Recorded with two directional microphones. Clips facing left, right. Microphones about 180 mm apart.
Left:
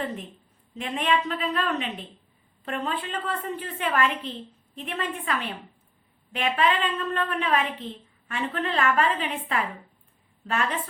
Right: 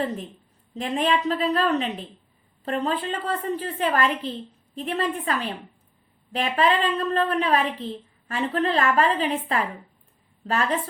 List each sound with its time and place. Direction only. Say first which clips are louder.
0.7 s a woman's voice: right 3 dB; 35° right (ahead or behind)